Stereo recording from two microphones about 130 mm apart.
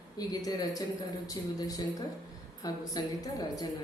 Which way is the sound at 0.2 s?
30° left (ahead or behind).